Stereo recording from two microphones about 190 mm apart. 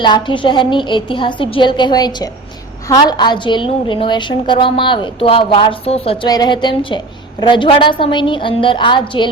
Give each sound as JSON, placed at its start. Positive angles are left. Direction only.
{"t": 0.0, "sound": "a woman's voice", "side_deg": 25}